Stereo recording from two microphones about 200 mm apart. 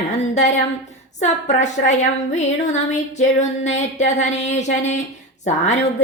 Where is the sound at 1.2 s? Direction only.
35° left (ahead or behind).